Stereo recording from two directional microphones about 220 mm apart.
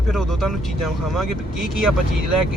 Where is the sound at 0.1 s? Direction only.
Centre (ahead or behind).